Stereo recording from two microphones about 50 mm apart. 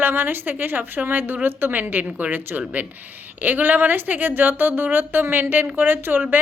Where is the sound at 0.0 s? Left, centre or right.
Right.